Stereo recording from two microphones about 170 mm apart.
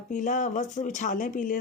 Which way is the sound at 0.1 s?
45° left (ahead or behind).